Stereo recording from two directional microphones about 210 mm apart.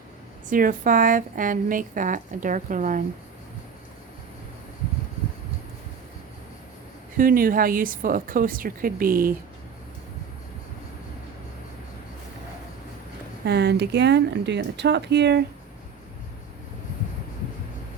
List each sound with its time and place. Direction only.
0.4 s speech: 40° right (ahead or behind)
7.2 s speech: 40° right (ahead or behind)
13.4 s speech: 50° right (ahead or behind)